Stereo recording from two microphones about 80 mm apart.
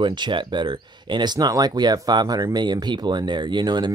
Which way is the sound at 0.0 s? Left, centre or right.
Right.